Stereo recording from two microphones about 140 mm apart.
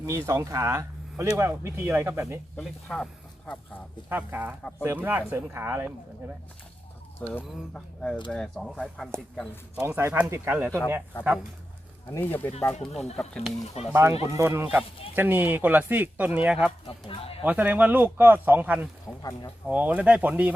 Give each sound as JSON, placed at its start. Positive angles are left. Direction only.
{"t": 0.0, "sound": "speech", "side_deg": -20}
{"t": 2.6, "sound": "speech", "side_deg": 5}
{"t": 4.1, "sound": "speech", "side_deg": -15}
{"t": 7.2, "sound": "speech", "side_deg": 10}
{"t": 9.8, "sound": "speech", "side_deg": -15}
{"t": 12.1, "sound": "speech", "side_deg": 15}
{"t": 12.8, "sound": "speech", "side_deg": 0}
{"t": 13.9, "sound": "speech", "side_deg": -20}
{"t": 17.1, "sound": "speech", "side_deg": 45}
{"t": 17.4, "sound": "speech", "side_deg": -10}
{"t": 19.0, "sound": "speech", "side_deg": 25}
{"t": 19.6, "sound": "speech", "side_deg": -10}